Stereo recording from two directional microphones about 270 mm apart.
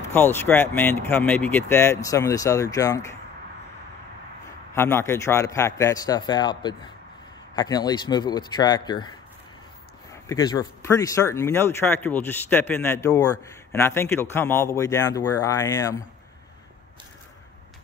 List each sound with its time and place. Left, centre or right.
0.1 s speech: centre
4.7 s speech: centre
10.2 s speech: centre